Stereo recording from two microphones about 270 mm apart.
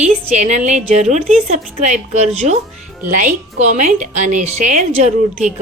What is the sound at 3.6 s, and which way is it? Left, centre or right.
A woman's voice, right.